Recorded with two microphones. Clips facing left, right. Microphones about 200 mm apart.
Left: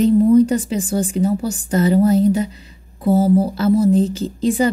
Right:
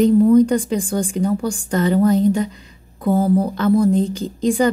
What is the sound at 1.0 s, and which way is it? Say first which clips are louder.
A woman's voice: left 1 dB; 5° left (ahead or behind).